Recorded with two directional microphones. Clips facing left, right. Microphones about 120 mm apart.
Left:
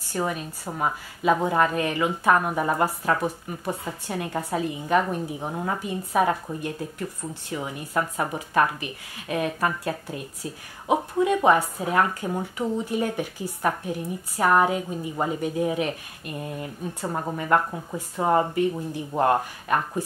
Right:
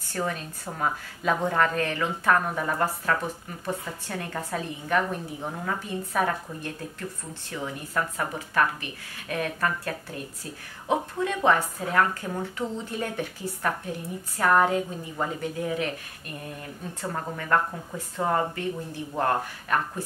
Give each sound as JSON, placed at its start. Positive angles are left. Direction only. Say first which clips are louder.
{"t": 0.1, "sound": "a woman's voice", "louder": "left 3 dB", "side_deg": 15}